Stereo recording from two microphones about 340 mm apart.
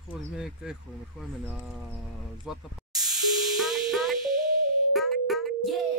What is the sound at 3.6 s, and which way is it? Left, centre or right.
Music, centre.